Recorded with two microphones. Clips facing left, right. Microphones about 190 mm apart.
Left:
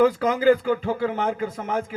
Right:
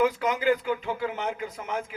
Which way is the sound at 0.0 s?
35° left (ahead or behind).